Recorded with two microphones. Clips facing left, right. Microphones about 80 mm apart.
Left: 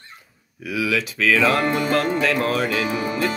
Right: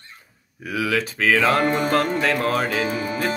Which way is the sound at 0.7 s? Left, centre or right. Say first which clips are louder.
Even; right.